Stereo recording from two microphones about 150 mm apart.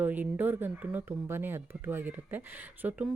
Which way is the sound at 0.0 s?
10° right (ahead or behind).